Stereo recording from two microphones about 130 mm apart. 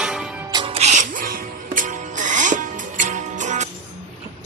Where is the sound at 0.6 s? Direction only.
55° right (ahead or behind).